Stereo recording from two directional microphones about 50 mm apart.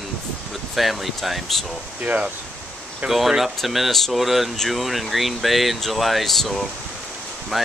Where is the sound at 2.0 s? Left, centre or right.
Right.